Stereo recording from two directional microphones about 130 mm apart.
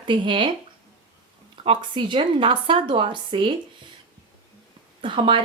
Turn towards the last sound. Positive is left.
turn(degrees=-40)  # may be behind; listen again after turning